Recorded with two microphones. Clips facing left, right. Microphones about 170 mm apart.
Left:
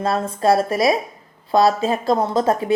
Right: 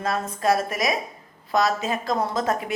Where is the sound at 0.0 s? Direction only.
30° left (ahead or behind).